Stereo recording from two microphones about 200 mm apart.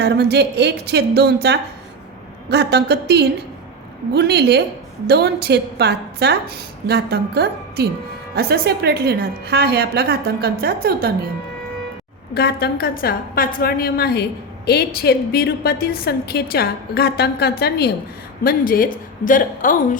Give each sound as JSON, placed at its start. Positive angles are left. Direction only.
{"t": 0.0, "sound": "a woman's voice", "side_deg": -55}
{"t": 12.3, "sound": "a woman's voice", "side_deg": 50}